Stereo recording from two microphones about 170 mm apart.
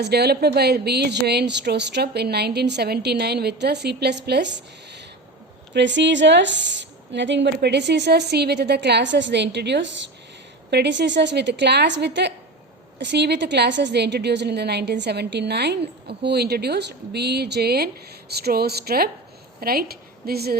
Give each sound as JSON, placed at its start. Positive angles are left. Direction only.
{"t": 0.0, "sound": "a woman's voice", "side_deg": -70}
{"t": 5.7, "sound": "a woman's voice", "side_deg": -90}